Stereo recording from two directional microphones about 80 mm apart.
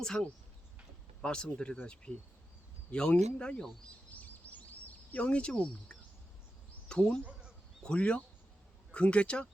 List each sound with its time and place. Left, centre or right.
0.0 s speech: centre
4.1 s bird: centre
5.1 s speech: centre